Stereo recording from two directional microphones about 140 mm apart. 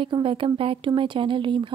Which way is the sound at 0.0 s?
40° right (ahead or behind).